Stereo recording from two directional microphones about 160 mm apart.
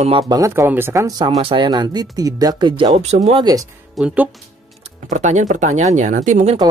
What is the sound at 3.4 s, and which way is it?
Speech, 25° right (ahead or behind).